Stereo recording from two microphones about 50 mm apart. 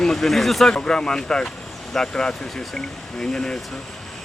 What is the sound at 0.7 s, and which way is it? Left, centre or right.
Speech, centre.